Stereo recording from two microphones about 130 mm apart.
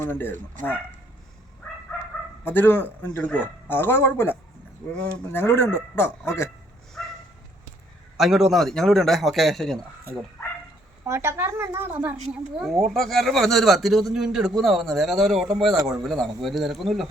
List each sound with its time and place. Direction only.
0.0 s speech: 15° left (ahead or behind)
0.6 s speech: 75° right (ahead or behind)
2.4 s speech: 15° left (ahead or behind)
7.0 s bow-wow: centre (ahead or behind)
8.2 s a man's voice: centre (ahead or behind)
11.0 s a woman's voice: 20° right (ahead or behind)
12.5 s a man's voice: centre (ahead or behind)